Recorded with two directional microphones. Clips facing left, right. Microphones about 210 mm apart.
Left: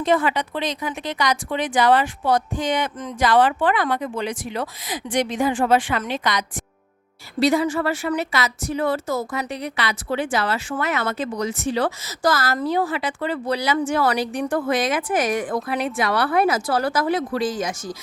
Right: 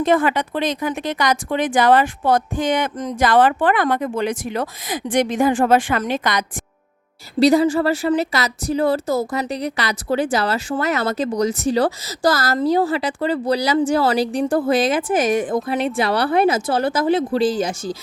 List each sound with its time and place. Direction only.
0.0 s speech: 50° right (ahead or behind)
7.3 s speech: 35° right (ahead or behind)